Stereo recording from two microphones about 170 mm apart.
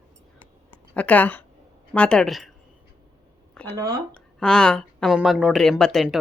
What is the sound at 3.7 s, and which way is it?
Speech, 20° right (ahead or behind).